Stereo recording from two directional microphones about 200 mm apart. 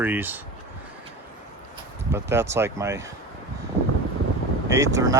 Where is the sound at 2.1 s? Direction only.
15° right (ahead or behind).